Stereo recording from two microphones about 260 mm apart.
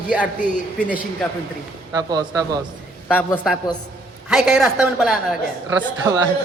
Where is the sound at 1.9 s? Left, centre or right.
Centre.